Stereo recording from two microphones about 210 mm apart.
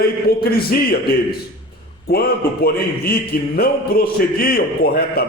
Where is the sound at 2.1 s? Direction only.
45° left (ahead or behind).